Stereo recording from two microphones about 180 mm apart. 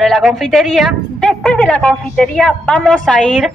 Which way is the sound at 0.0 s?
Centre (ahead or behind).